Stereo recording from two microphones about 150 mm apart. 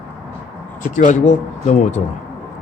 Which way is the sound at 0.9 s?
60° left (ahead or behind).